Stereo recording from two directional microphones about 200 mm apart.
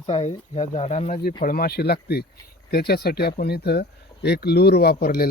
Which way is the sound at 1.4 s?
50° left (ahead or behind).